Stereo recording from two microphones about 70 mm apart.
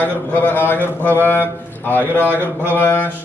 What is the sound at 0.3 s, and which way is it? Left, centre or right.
A man's voice, left.